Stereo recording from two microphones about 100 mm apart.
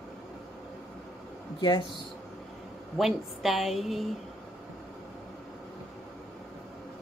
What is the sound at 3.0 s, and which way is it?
Speech, 5° right (ahead or behind).